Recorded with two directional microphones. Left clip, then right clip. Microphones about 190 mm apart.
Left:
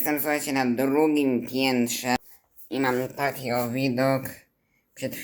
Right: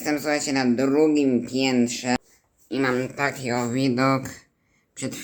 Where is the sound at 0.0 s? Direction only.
15° right (ahead or behind).